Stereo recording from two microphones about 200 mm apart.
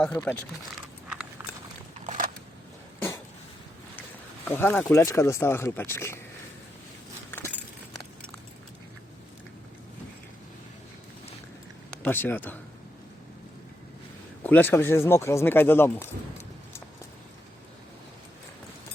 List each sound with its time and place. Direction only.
0.0 s speech: 10° left (ahead or behind)
2.0 s a sound: 45° right (ahead or behind)
4.4 s speech: 10° left (ahead or behind)
7.3 s keys jangling: 10° left (ahead or behind)
12.0 s speech: 10° left (ahead or behind)
14.4 s speech: 10° left (ahead or behind)